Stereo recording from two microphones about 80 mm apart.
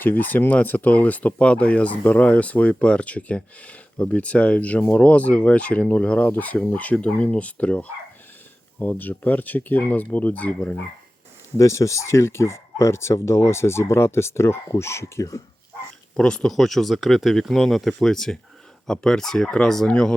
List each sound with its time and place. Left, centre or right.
0.0 s speech: left
11.5 s speech: left
16.1 s speech: centre